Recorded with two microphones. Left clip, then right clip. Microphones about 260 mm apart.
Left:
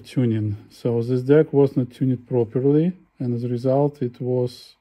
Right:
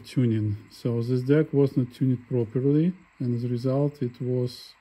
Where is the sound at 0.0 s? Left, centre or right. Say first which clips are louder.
Left 3 dB; centre.